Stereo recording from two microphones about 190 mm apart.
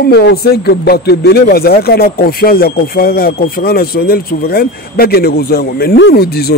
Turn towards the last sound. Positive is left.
turn(degrees=55)  # may be behind; listen again after turning